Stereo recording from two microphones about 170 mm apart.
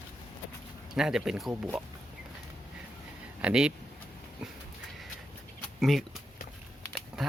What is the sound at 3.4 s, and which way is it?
Speech, 5° right (ahead or behind).